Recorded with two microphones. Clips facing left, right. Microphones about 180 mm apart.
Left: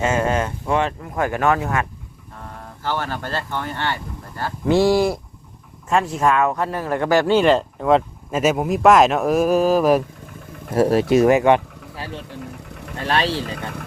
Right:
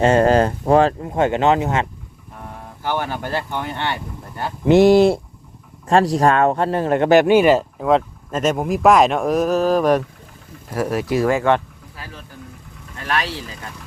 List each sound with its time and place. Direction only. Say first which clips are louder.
0.0 s speech: right 6 dB; 35° right (ahead or behind)
5.9 s speech: right 4 dB; 35° right (ahead or behind); by 10.0 s 5° left (ahead or behind)
10.7 s speech: left 5 dB; 30° left (ahead or behind)
11.9 s speech: left 6 dB; 30° left (ahead or behind)
12.3 s engine: left 6 dB; 75° left (ahead or behind)
13.0 s speech: left 3 dB; 30° left (ahead or behind)